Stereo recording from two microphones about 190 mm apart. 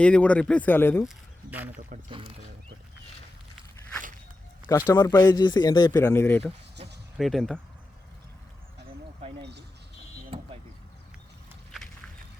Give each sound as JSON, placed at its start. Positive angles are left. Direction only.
{"t": 0.0, "sound": "speech", "side_deg": 5}
{"t": 1.0, "sound": "speech", "side_deg": -10}
{"t": 2.0, "sound": "speech", "side_deg": -30}
{"t": 4.9, "sound": "speech", "side_deg": 15}
{"t": 6.8, "sound": "a sound", "side_deg": -30}
{"t": 7.2, "sound": "speech", "side_deg": 0}
{"t": 9.4, "sound": "a sound", "side_deg": -65}
{"t": 10.3, "sound": "vehicle", "side_deg": -30}